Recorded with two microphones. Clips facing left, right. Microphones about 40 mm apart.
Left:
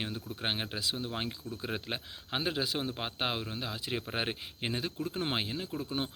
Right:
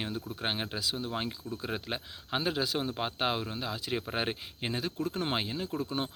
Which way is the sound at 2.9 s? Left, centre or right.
Centre.